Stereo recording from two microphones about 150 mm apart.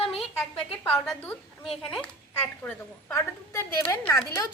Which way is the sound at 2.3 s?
15° left (ahead or behind).